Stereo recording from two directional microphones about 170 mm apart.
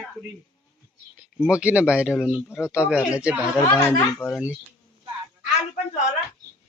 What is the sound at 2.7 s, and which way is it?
Speech, 5° right (ahead or behind).